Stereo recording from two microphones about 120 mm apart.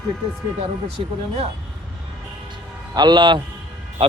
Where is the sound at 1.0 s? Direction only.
60° right (ahead or behind).